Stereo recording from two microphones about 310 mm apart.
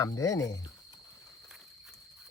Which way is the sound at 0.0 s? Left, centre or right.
Centre.